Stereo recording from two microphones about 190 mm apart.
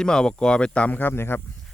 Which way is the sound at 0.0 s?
5° left (ahead or behind).